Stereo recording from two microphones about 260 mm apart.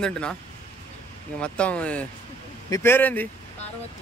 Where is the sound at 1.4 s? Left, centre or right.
Centre.